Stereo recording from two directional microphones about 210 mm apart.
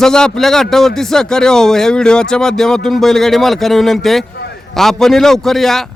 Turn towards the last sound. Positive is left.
turn(degrees=0)  # may be behind; listen again after turning